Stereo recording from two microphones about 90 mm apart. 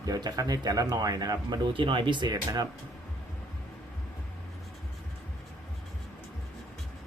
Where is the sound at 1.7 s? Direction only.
70° right (ahead or behind); by 2.7 s 50° right (ahead or behind).